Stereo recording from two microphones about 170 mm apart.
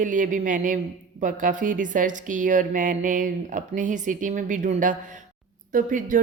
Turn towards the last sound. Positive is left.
turn(degrees=-50)  # may be behind; listen again after turning